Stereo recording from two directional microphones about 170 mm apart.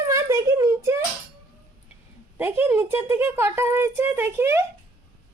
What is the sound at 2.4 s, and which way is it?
Speech, 15° right (ahead or behind).